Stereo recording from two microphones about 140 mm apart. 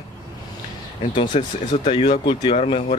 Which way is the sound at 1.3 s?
45° left (ahead or behind).